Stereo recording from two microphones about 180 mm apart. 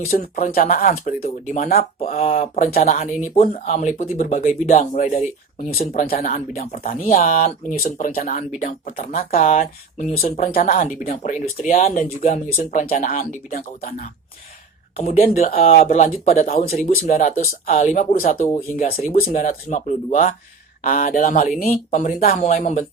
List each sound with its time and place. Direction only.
0.1 s speech: 45° left (ahead or behind)
6.1 s speech: 50° left (ahead or behind)
10.4 s speech: 50° left (ahead or behind)
14.9 s speech: 35° left (ahead or behind); by 22.4 s 55° left (ahead or behind)
22.4 s speech: 40° left (ahead or behind)